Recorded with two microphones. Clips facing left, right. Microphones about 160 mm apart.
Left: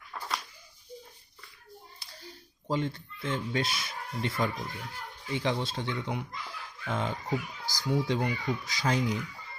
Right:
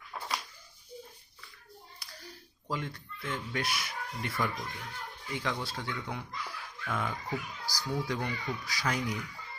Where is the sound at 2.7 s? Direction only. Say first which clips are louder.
Left 6 dB; 25° left (ahead or behind).